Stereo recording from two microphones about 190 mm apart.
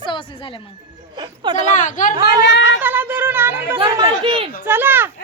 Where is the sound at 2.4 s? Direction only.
75° left (ahead or behind).